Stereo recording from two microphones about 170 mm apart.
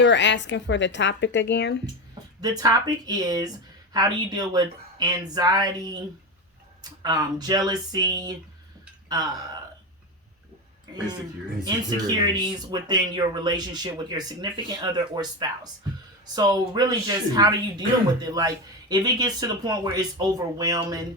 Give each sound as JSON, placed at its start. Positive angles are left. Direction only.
{"t": 0.0, "sound": "speech", "side_deg": 90}
{"t": 2.4, "sound": "speech", "side_deg": -20}
{"t": 7.0, "sound": "speech", "side_deg": -25}
{"t": 11.6, "sound": "speech", "side_deg": -20}